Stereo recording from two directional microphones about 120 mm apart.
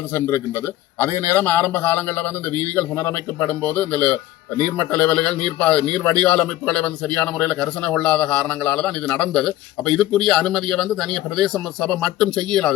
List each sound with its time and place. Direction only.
0.1 s a man's voice: 25° left (ahead or behind); by 12.7 s 5° left (ahead or behind)